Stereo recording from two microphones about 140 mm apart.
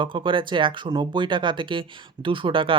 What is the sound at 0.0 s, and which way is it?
Speech, 35° right (ahead or behind).